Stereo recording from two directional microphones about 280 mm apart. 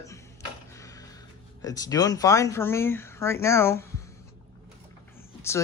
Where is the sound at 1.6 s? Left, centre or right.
Centre.